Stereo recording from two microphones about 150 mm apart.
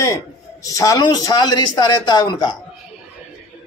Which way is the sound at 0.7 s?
25° left (ahead or behind).